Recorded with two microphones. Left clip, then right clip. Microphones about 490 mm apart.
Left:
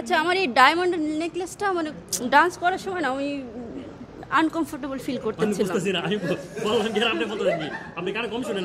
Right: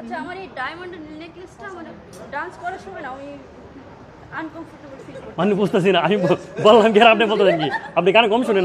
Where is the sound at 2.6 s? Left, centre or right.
Right.